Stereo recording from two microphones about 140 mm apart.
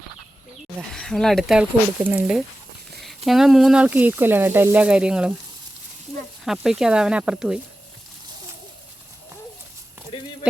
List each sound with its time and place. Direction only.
0.8 s speech: centre (ahead or behind)
2.0 s speech: 10° right (ahead or behind)
6.4 s speech: 5° right (ahead or behind)
10.1 s a sound: 35° left (ahead or behind)